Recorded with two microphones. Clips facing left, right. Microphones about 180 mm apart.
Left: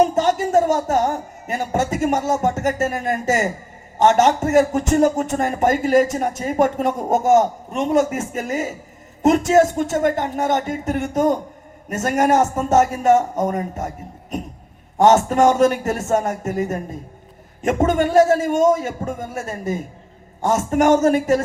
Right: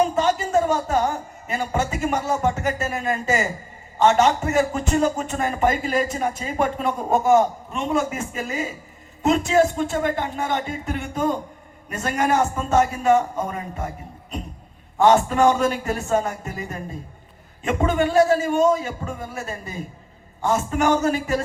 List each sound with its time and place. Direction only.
0.1 s a sound: 45° left (ahead or behind)
1.5 s a man's voice: 45° left (ahead or behind)
15.0 s a man's voice: 45° left (ahead or behind)